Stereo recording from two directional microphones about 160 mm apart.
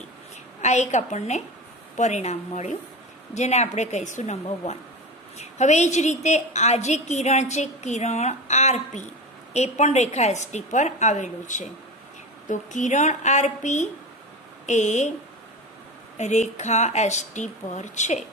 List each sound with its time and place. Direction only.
0.6 s a woman's voice: 45° left (ahead or behind)
16.2 s a woman's voice: 45° left (ahead or behind)